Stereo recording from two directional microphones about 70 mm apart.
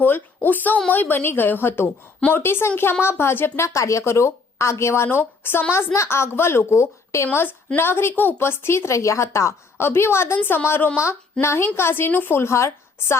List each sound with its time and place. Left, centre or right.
0.0 s a woman's voice: left